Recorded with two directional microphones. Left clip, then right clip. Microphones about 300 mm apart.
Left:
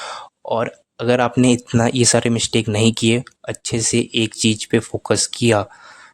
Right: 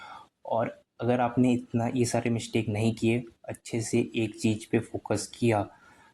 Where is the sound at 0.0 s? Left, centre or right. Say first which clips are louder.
Left 13 dB; left.